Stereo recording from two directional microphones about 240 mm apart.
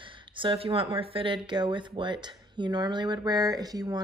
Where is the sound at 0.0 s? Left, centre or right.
Right.